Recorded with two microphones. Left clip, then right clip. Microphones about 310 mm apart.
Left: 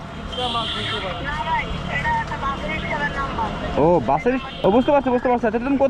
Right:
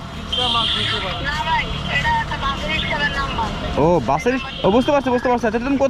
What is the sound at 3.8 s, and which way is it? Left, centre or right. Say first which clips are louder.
Speech: even; left.